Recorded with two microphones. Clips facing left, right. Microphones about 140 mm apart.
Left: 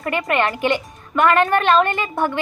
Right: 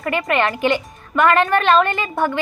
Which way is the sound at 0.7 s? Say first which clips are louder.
Right 1 dB; 20° left (ahead or behind).